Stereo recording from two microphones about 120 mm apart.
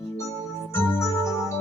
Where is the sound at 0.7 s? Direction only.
20° left (ahead or behind).